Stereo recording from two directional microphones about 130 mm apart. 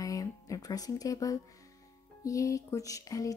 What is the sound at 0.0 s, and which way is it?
Music, 25° left (ahead or behind).